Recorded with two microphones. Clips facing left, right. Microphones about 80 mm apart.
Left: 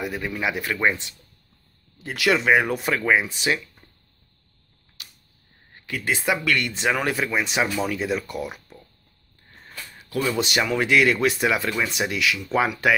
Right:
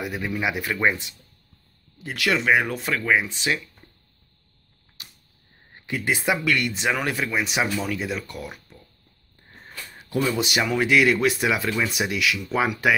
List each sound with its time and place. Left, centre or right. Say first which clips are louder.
0.0 s speech: even; centre
2.0 s speech: left 2 dB; centre
5.8 s speech: right 1 dB; right; by 8.7 s centre
9.5 s wheeze: even; right
10.2 s speech: left 1 dB; centre